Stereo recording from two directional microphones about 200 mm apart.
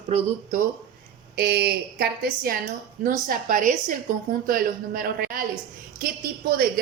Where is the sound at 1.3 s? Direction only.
55° right (ahead or behind).